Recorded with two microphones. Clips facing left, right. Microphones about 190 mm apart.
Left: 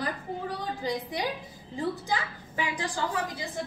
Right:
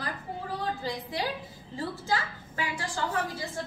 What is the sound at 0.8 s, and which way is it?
A woman's voice, 15° left (ahead or behind).